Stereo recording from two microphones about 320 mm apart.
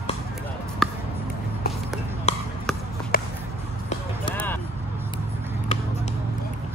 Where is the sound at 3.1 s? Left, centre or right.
Left.